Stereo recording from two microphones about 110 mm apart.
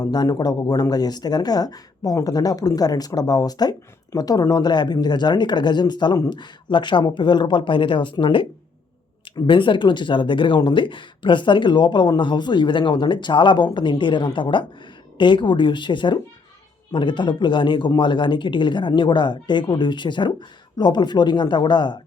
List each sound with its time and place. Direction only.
0.0 s speech: 35° left (ahead or behind)
9.5 s speech: 50° left (ahead or behind)